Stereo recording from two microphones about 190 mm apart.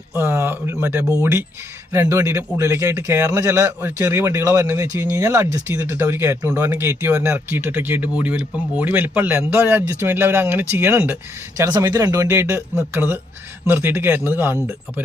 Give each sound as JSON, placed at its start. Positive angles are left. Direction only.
{"t": 0.2, "sound": "a man's voice", "side_deg": -10}